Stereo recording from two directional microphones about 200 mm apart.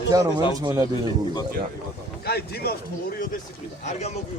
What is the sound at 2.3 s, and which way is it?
Speech, 55° left (ahead or behind).